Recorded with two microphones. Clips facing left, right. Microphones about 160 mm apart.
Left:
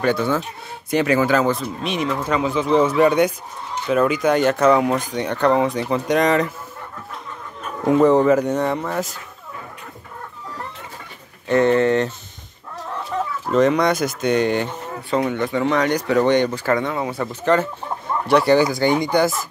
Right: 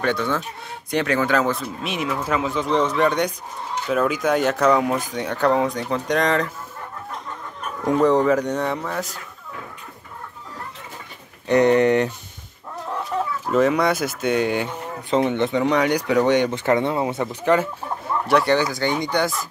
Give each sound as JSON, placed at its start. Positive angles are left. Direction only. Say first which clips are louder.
{"t": 0.0, "sound": "speech", "louder": "left 3 dB", "side_deg": 5}
{"t": 7.8, "sound": "speech", "louder": "left 3 dB", "side_deg": 5}
{"t": 11.4, "sound": "speech", "louder": "even", "side_deg": -15}
{"t": 13.1, "sound": "chicken", "louder": "left 1 dB", "side_deg": -5}
{"t": 13.5, "sound": "speech", "louder": "left 2 dB", "side_deg": -5}
{"t": 15.0, "sound": "speech", "louder": "right 1 dB", "side_deg": -25}
{"t": 16.4, "sound": "speech", "louder": "right 1 dB", "side_deg": -25}
{"t": 18.2, "sound": "speech", "louder": "left 4 dB", "side_deg": 0}